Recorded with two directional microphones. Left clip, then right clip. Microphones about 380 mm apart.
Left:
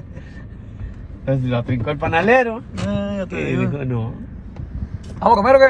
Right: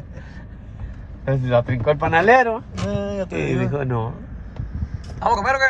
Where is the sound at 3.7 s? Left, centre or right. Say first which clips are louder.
Right 2 dB; centre.